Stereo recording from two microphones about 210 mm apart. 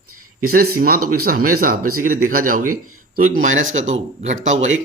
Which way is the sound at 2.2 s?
40° right (ahead or behind).